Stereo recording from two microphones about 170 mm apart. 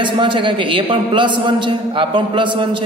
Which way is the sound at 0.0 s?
30° right (ahead or behind).